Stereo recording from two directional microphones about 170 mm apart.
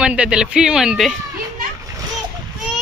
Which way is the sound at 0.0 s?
5° right (ahead or behind).